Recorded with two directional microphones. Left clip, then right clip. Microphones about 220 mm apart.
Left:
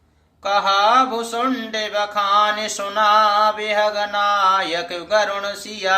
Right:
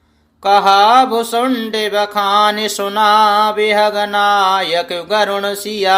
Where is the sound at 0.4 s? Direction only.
40° right (ahead or behind).